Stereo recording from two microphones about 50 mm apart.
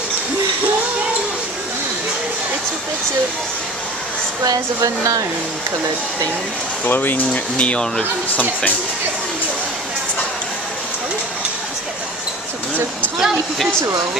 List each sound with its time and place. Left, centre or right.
6.9 s speech: left
13.2 s a woman's voice: centre